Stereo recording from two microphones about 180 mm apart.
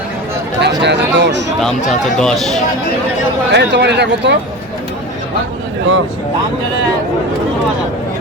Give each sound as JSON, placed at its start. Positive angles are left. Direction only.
{"t": 0.6, "sound": "chatter", "side_deg": -75}
{"t": 1.6, "sound": "speech", "side_deg": 5}
{"t": 3.5, "sound": "speech", "side_deg": -70}